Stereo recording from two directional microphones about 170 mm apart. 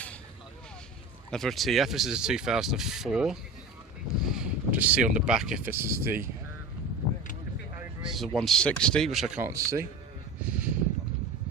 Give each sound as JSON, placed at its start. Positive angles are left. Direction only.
{"t": 1.3, "sound": "speech", "side_deg": 0}
{"t": 8.1, "sound": "speech", "side_deg": 0}
{"t": 9.4, "sound": "speech", "side_deg": -15}
{"t": 10.4, "sound": "a sound", "side_deg": -5}